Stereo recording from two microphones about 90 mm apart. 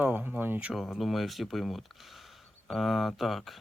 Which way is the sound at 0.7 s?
Centre (ahead or behind).